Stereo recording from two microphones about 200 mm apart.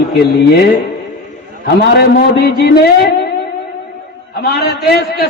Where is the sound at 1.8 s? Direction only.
50° left (ahead or behind).